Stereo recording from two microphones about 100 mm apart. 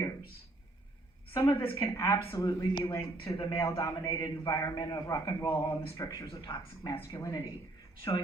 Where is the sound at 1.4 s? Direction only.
35° left (ahead or behind).